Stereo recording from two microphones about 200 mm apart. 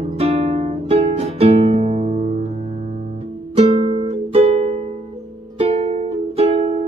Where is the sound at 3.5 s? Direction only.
30° right (ahead or behind).